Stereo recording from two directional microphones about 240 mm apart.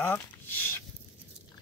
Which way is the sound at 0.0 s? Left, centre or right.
Centre.